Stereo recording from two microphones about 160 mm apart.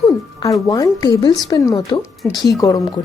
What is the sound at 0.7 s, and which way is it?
Speech, 20° left (ahead or behind).